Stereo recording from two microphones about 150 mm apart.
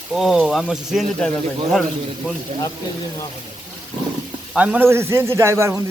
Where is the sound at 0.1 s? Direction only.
5° right (ahead or behind).